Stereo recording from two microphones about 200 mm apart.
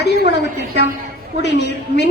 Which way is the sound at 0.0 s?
60° left (ahead or behind).